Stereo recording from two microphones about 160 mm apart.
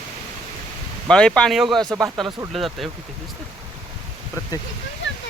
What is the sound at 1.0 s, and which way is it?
Speech, 5° left (ahead or behind).